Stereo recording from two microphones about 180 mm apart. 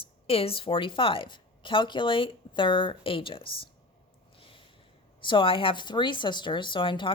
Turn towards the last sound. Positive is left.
turn(degrees=25)  # may be behind; listen again after turning